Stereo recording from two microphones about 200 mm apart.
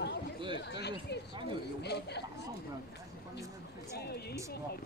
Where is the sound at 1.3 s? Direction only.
25° right (ahead or behind).